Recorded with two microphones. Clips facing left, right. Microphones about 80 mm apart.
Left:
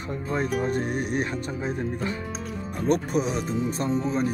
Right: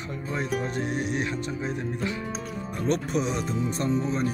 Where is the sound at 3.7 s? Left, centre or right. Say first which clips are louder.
Right 2 dB; left.